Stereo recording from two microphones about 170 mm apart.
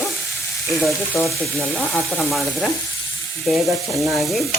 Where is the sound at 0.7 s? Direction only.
Centre (ahead or behind).